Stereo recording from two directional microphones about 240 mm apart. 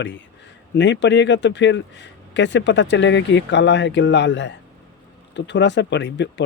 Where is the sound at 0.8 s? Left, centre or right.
Left.